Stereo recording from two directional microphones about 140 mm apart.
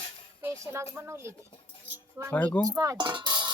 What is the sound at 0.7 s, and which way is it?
Speech, 20° right (ahead or behind).